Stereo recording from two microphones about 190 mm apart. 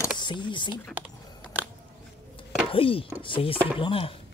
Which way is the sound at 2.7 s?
30° left (ahead or behind).